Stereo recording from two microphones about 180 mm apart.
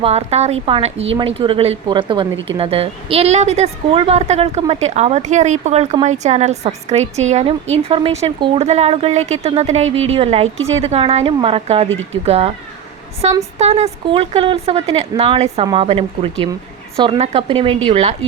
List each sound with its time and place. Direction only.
0.0 s a woman's voice: 35° right (ahead or behind)